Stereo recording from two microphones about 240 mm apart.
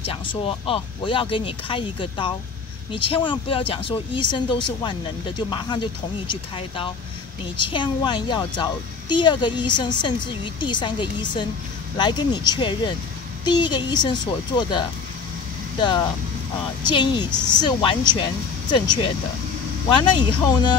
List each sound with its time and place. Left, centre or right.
0.0 s speech: left
7.5 s speech: centre